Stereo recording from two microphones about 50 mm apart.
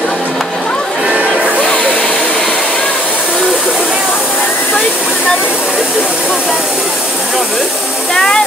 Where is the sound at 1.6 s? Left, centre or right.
Left.